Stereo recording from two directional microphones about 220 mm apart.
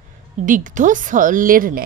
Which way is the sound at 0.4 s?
35° right (ahead or behind).